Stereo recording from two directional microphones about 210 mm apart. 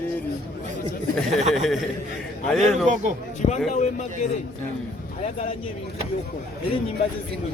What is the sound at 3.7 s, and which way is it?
Speech, 35° left (ahead or behind).